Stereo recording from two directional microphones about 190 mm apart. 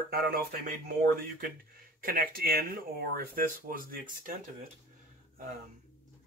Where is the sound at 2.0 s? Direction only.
50° right (ahead or behind).